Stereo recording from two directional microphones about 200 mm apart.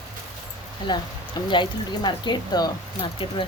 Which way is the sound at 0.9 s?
20° left (ahead or behind).